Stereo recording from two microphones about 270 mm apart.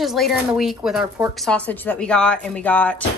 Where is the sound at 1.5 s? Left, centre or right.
Centre.